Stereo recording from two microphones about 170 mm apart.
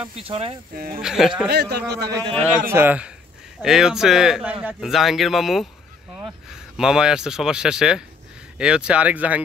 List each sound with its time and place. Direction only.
0.0 s speech: 35° right (ahead or behind)
0.7 s speech: 55° right (ahead or behind)
1.0 s speech: 5° right (ahead or behind)
1.5 s a man's voice: 75° right (ahead or behind)
2.0 s a man's voice: 25° right (ahead or behind)
2.7 s speech: 10° right (ahead or behind)